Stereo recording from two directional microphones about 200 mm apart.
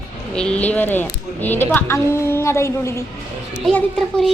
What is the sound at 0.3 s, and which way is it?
A woman's voice, 5° left (ahead or behind).